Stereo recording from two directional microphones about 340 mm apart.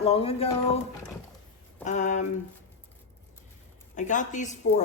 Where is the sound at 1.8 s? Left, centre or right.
Left.